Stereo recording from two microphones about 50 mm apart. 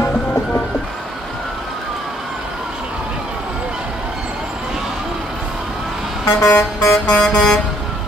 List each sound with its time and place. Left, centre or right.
6.2 s vehicle: left
7.2 s vehicle: centre